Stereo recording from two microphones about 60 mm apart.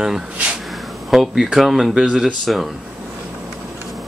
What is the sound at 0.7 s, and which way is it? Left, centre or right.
Speech, centre.